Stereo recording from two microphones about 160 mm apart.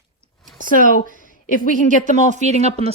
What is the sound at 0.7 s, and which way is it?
A woman's voice, 55° left (ahead or behind).